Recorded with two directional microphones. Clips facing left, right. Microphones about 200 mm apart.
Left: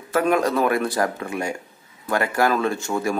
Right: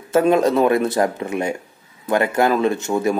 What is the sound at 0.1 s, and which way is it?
Speech, 25° right (ahead or behind).